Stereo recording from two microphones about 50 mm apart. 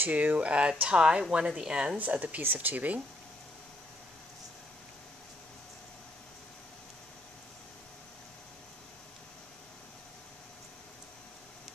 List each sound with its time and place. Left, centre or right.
0.0 s speech: right; by 2.0 s centre
2.0 s speech: right
2.4 s speech: right